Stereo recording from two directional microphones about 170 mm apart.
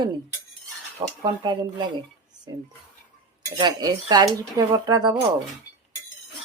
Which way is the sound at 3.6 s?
25° right (ahead or behind).